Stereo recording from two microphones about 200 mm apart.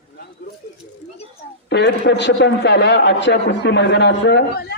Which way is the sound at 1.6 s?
60° left (ahead or behind).